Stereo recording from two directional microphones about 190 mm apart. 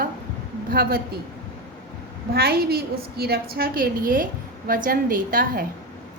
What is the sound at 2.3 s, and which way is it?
A woman's voice, 55° right (ahead or behind).